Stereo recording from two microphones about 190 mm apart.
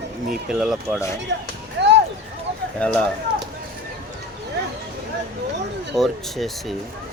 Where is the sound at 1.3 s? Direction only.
70° right (ahead or behind).